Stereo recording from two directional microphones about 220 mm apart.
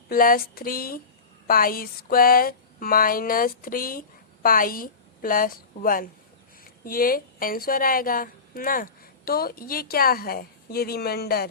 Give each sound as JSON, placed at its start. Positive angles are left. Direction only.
{"t": 0.1, "sound": "a woman's voice", "side_deg": 40}